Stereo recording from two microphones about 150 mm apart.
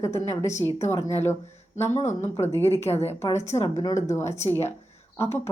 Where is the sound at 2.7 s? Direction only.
45° left (ahead or behind).